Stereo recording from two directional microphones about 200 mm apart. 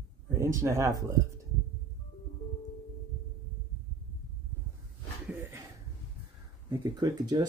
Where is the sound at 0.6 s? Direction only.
15° right (ahead or behind).